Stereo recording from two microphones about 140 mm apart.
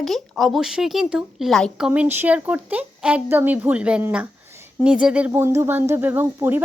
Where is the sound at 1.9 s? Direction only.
15° right (ahead or behind).